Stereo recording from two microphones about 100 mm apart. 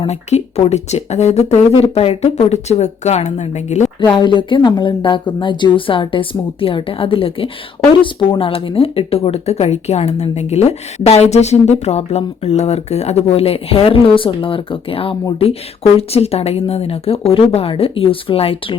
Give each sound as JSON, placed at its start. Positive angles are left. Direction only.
{"t": 0.1, "sound": "speech", "side_deg": 90}
{"t": 4.2, "sound": "speech", "side_deg": 55}
{"t": 16.0, "sound": "speech", "side_deg": 90}